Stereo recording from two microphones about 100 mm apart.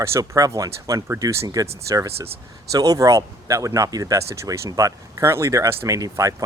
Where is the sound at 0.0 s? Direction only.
30° right (ahead or behind).